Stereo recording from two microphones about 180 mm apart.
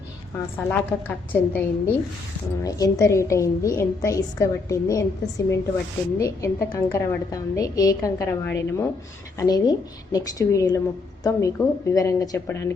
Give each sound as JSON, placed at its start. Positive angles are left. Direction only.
{"t": 0.5, "sound": "a woman's voice", "side_deg": 10}